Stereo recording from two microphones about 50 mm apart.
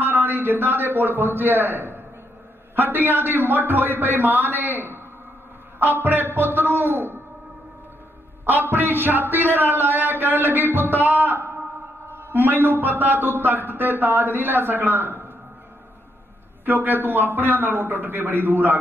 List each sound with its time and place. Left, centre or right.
0.0 s a man's voice: right
8.5 s a man's voice: right
16.6 s a man's voice: right